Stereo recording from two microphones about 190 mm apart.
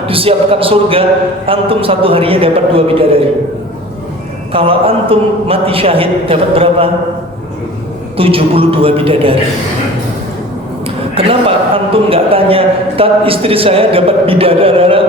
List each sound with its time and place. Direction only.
0.1 s a man's voice: 30° right (ahead or behind)
4.5 s a man's voice: 30° right (ahead or behind)
8.1 s a man's voice: 30° right (ahead or behind)
11.1 s a man's voice: 30° right (ahead or behind)